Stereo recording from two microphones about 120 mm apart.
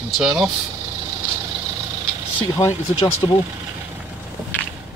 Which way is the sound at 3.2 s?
40° left (ahead or behind).